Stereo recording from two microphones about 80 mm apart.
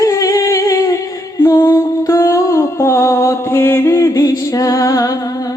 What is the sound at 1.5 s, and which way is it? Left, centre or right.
Music, left.